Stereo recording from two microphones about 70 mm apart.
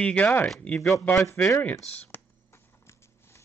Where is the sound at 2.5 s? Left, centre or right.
Left.